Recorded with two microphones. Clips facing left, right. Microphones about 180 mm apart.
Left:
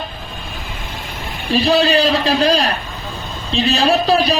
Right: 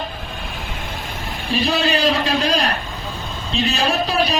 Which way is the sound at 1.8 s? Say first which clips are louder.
Left 5 dB; 35° left (ahead or behind).